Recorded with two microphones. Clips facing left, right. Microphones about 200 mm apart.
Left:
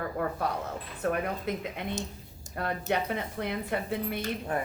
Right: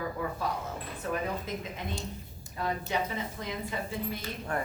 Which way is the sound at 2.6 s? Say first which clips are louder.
Left 2 dB; 60° left (ahead or behind).